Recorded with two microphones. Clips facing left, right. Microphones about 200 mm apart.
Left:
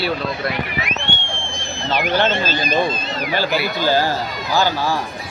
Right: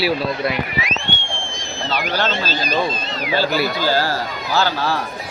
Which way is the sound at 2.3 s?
50° left (ahead or behind).